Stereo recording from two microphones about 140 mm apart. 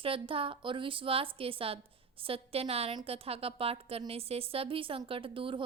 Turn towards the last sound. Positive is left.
turn(degrees=-40)  # may be behind; listen again after turning